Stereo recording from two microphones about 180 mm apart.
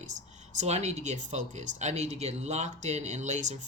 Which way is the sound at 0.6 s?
40° right (ahead or behind).